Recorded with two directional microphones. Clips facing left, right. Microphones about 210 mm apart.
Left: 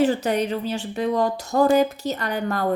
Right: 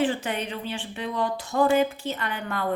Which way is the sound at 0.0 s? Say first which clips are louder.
Left 6 dB; 40° left (ahead or behind).